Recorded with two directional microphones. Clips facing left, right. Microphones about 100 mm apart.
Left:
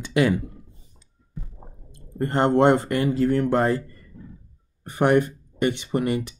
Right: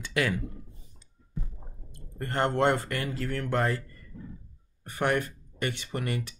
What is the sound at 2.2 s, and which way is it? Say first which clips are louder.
Speech: left 7 dB; 20° left (ahead or behind).